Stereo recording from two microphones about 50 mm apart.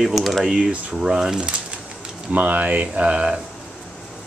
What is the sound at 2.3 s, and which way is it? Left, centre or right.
Speech, right.